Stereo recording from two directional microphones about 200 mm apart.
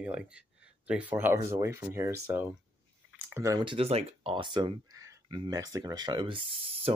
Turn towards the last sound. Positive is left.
turn(degrees=-30)  # may be behind; listen again after turning